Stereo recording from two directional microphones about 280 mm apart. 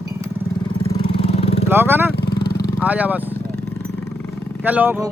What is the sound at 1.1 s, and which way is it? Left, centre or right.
Vehicle, left.